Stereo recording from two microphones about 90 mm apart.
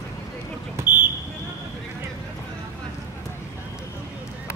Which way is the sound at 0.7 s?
20° right (ahead or behind).